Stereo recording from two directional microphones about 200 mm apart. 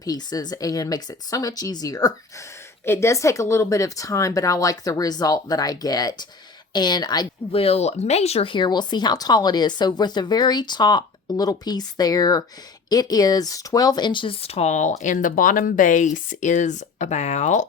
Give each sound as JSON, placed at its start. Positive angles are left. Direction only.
{"t": 0.0, "sound": "speech", "side_deg": 20}